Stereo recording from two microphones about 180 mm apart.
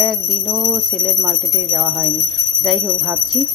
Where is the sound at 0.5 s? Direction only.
35° right (ahead or behind).